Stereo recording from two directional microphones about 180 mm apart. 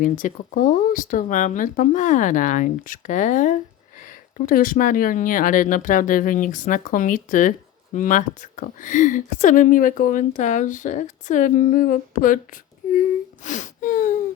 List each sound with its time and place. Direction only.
0.0 s speech: 45° left (ahead or behind)
12.9 s whimper: 45° left (ahead or behind)